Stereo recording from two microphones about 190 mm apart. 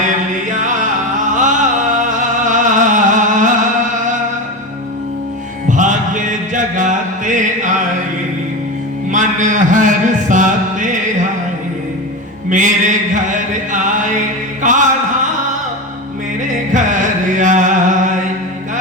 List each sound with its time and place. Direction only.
0.5 s music: 40° right (ahead or behind)
5.6 s music: 40° right (ahead or behind)
9.1 s music: 40° right (ahead or behind)
12.5 s music: 40° right (ahead or behind)
14.6 s music: 40° right (ahead or behind)
16.7 s carnatic music: 40° right (ahead or behind)